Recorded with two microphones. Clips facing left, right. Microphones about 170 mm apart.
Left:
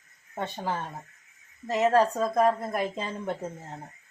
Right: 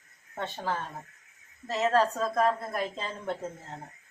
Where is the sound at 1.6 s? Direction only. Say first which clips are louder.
Left 3 dB; 15° left (ahead or behind).